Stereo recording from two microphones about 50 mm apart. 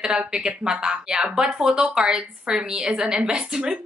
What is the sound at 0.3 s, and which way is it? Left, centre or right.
A woman's voice, centre.